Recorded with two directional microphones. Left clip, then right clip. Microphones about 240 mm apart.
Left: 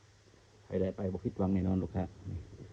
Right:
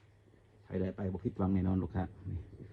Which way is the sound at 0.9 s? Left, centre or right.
Right.